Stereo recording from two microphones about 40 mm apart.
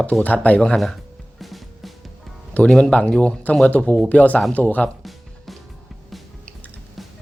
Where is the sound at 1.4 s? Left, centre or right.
Centre.